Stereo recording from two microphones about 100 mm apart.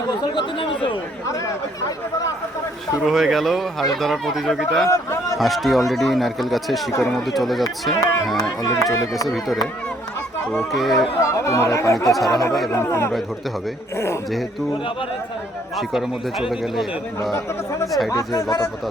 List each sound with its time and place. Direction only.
0.2 s speech: 55° left (ahead or behind)
3.1 s speech: centre (ahead or behind)
4.9 s a sound: 30° left (ahead or behind)
5.4 s speech: centre (ahead or behind)
8.6 s speech: 35° left (ahead or behind)
9.2 s speech: centre (ahead or behind)
11.2 s speech: 30° left (ahead or behind)
15.8 s speech: 5° right (ahead or behind)
18.1 s speech: 35° left (ahead or behind)